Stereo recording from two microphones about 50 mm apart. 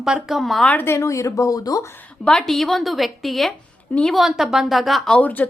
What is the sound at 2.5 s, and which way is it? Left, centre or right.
A woman's voice, centre.